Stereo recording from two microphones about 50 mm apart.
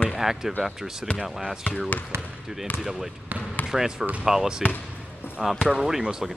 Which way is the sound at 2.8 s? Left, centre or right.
Centre.